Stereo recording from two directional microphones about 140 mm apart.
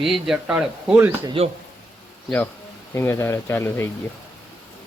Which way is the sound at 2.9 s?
20° left (ahead or behind).